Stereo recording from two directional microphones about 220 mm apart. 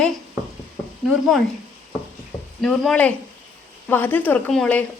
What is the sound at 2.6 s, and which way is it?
Speech, centre (ahead or behind).